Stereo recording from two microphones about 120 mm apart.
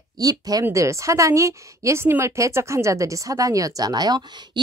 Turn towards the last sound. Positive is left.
turn(degrees=-35)  # may be behind; listen again after turning